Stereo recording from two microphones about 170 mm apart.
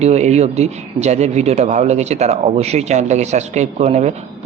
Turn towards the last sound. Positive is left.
turn(degrees=-40)  # may be behind; listen again after turning